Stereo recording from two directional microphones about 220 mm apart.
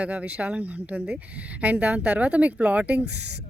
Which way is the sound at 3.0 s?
50° right (ahead or behind).